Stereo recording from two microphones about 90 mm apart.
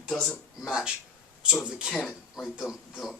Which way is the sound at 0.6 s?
5° right (ahead or behind).